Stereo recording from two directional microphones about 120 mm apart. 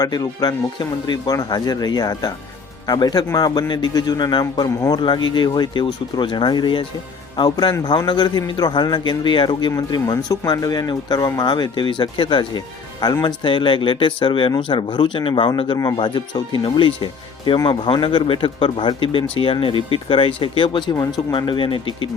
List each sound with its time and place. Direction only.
0.0 s speech: 30° left (ahead or behind)